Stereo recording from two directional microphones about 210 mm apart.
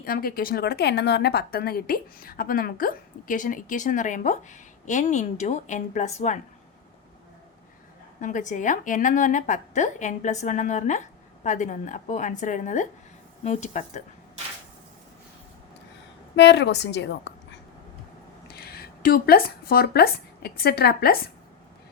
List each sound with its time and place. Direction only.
0.0 s a woman's voice: 45° left (ahead or behind)
8.2 s a woman's voice: 35° left (ahead or behind)
16.3 s a woman's voice: 55° left (ahead or behind)
18.4 s speech: 50° left (ahead or behind)